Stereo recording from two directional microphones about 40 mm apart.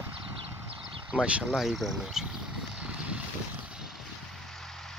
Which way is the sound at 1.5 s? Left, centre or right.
Centre.